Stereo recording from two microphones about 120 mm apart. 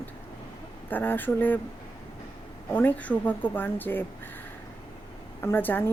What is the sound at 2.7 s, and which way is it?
A woman's voice, 15° left (ahead or behind).